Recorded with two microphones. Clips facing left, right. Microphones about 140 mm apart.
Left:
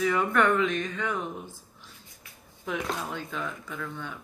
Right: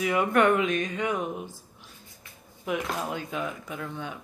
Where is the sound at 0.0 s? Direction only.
15° right (ahead or behind).